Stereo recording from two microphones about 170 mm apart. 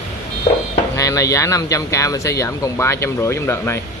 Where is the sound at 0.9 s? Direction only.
20° left (ahead or behind).